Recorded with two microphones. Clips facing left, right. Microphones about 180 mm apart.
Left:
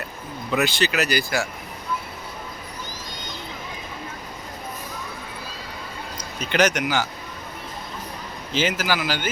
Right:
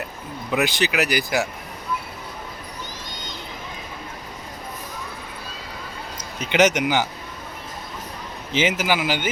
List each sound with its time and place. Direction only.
0.5 s speech: 15° right (ahead or behind)
6.4 s speech: 20° right (ahead or behind)
8.5 s speech: 20° right (ahead or behind)